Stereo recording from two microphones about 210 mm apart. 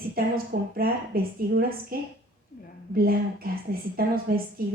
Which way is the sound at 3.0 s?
45° right (ahead or behind).